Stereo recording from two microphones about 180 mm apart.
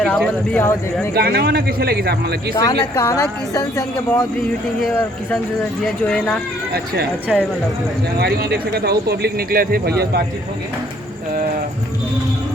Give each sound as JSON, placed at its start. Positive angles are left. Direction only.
{"t": 0.0, "sound": "speech", "side_deg": 5}
{"t": 1.1, "sound": "speech", "side_deg": -60}
{"t": 2.6, "sound": "speech", "side_deg": 20}
{"t": 5.8, "sound": "speech", "side_deg": 5}
{"t": 8.2, "sound": "speech", "side_deg": -60}